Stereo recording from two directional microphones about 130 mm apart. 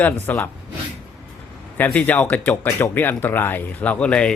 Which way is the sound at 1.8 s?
10° left (ahead or behind).